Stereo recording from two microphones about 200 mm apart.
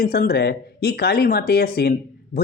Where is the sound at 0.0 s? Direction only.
50° left (ahead or behind).